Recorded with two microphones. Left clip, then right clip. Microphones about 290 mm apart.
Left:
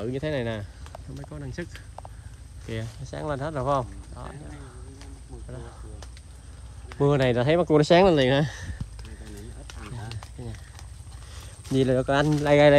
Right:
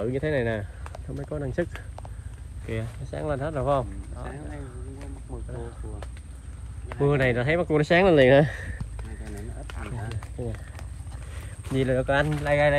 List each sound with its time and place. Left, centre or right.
0.0 s speech: centre
7.1 s speech: centre
9.7 s a sound: centre
9.9 s speech: centre
11.7 s speech: centre